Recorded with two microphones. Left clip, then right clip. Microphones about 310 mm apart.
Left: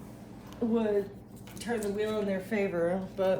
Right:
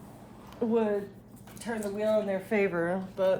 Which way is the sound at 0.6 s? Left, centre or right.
Right.